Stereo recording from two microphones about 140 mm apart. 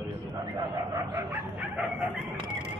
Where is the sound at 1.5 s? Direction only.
10° right (ahead or behind).